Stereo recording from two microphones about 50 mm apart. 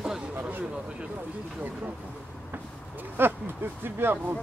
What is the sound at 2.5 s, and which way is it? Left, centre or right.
Speech, right.